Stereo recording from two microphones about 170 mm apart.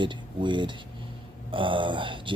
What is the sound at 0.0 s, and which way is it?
Speech, 25° right (ahead or behind).